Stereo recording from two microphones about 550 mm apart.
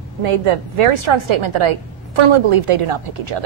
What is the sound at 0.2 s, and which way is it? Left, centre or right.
A woman's voice, right.